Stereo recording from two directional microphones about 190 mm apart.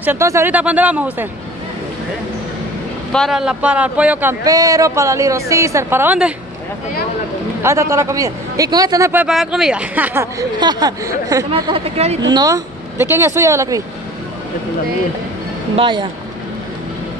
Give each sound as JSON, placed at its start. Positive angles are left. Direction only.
{"t": 0.0, "sound": "speech", "side_deg": -15}
{"t": 3.1, "sound": "speech", "side_deg": 0}
{"t": 7.6, "sound": "speech", "side_deg": -15}
{"t": 10.6, "sound": "speech", "side_deg": -20}
{"t": 11.5, "sound": "speech", "side_deg": -30}
{"t": 12.3, "sound": "speech", "side_deg": -20}
{"t": 15.7, "sound": "speech", "side_deg": -25}